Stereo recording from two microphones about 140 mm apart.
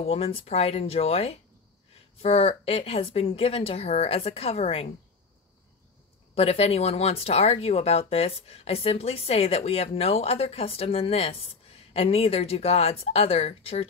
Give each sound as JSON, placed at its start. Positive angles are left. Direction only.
{"t": 0.0, "sound": "speech", "side_deg": 45}
{"t": 6.3, "sound": "speech", "side_deg": 45}